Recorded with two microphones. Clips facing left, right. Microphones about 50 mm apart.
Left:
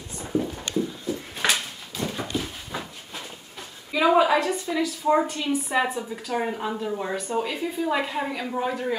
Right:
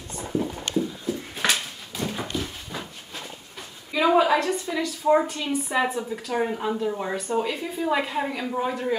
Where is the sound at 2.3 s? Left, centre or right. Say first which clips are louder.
Left 1 dB; centre.